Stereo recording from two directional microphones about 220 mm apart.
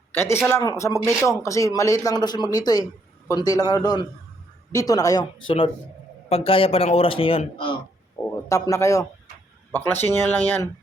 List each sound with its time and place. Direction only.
0.1 s a man's voice: 10° left (ahead or behind)
8.2 s a man's voice: 15° left (ahead or behind)